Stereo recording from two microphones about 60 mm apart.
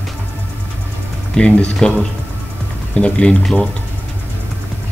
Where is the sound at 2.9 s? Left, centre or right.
Centre.